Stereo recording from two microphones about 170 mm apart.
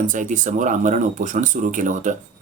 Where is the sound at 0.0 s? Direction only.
50° right (ahead or behind).